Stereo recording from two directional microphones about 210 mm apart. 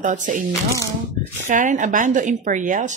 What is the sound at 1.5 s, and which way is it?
Speech, 35° right (ahead or behind).